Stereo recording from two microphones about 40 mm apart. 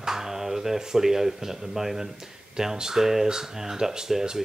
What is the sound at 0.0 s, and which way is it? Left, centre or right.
Speech, centre.